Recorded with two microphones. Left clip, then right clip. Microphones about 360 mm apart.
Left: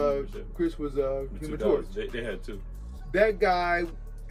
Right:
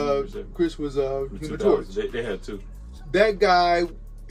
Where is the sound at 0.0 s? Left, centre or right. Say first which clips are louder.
Right 3 dB; centre.